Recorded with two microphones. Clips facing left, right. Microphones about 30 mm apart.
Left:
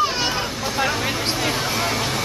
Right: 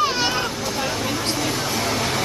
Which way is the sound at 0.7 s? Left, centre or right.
Centre.